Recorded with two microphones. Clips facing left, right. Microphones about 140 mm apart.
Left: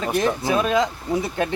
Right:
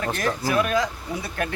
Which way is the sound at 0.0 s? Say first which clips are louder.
Left 4 dB; 15° left (ahead or behind).